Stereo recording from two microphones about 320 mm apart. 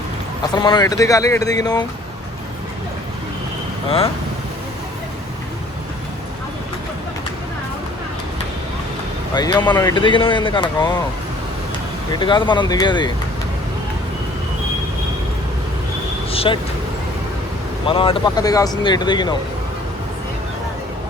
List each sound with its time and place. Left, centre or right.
0.5 s speech: centre
3.8 s speech: centre
9.3 s speech: centre
12.2 s speech: centre
16.3 s vehicle: centre
17.8 s speech: centre